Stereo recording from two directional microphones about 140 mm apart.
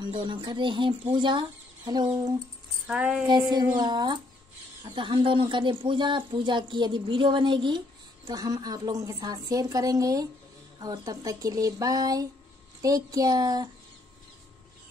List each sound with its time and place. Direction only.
0.0 s a woman's voice: 35° right (ahead or behind)
2.9 s music: 10° right (ahead or behind)
3.3 s a woman's voice: 30° right (ahead or behind)